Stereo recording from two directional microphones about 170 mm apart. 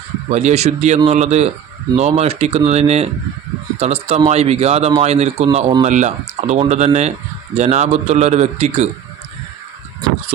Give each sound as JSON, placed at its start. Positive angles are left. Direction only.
{"t": 0.3, "sound": "a man's voice", "side_deg": -40}